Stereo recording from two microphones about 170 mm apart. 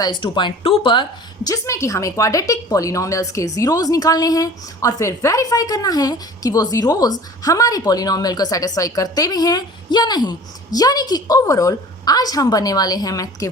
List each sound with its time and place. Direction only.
0.0 s a woman's voice: 25° left (ahead or behind)
1.5 s a woman's voice: 15° left (ahead or behind)